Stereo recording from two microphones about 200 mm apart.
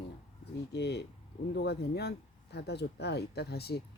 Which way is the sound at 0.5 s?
55° left (ahead or behind).